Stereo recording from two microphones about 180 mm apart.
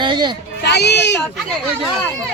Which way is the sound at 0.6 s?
70° left (ahead or behind).